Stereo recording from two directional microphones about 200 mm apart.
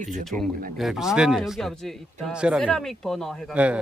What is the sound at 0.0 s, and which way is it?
Speech, 40° right (ahead or behind).